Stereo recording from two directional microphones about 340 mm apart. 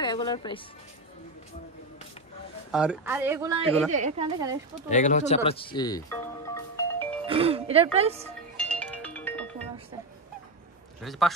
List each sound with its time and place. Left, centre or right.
0.0 s speech: centre
2.7 s speech: centre
3.9 s speech: centre
4.8 s speech: left
7.2 s speech: centre
8.5 s music: centre
11.0 s a man's voice: centre